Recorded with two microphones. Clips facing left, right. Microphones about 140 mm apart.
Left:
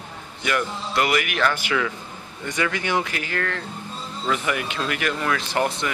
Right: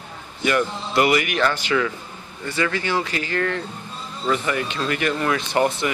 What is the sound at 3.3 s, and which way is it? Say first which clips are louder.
Speech: right 5 dB; 5° right (ahead or behind).